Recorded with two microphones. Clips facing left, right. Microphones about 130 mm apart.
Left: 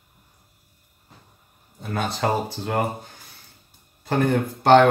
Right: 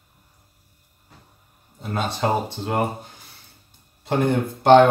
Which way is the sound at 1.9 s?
20° right (ahead or behind).